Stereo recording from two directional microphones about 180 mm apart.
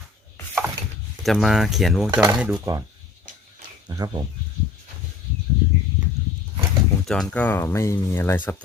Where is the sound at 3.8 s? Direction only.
20° right (ahead or behind).